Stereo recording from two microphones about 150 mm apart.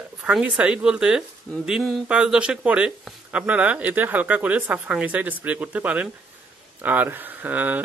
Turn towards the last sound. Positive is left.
turn(degrees=-10)  # may be behind; listen again after turning